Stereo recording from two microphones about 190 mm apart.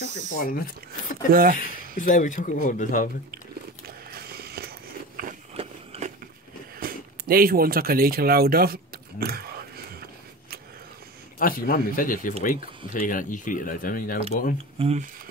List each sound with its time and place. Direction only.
0.5 s speech: 50° left (ahead or behind)
1.3 s speech: 50° right (ahead or behind)
1.6 s speech: 40° left (ahead or behind)
3.8 s biting: 55° right (ahead or behind)
5.6 s a sound: 35° right (ahead or behind)
6.8 s speech: 50° right (ahead or behind)
9.2 s a sound: 55° right (ahead or behind)
11.3 s speech: 50° left (ahead or behind)
14.8 s speech: 35° right (ahead or behind)